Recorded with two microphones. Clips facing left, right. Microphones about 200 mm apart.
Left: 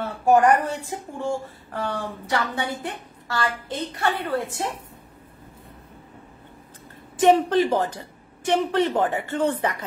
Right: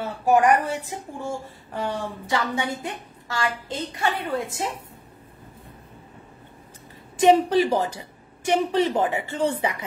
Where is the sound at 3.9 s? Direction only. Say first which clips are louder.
Left 1 dB; 10° right (ahead or behind).